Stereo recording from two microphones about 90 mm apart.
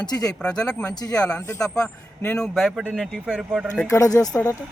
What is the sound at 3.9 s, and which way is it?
Speech, 40° left (ahead or behind).